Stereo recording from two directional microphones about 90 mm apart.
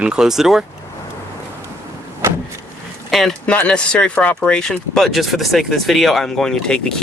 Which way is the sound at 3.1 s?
5° left (ahead or behind).